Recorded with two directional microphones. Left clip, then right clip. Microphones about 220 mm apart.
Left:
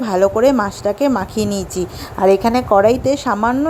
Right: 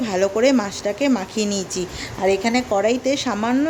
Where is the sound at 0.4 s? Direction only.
25° left (ahead or behind).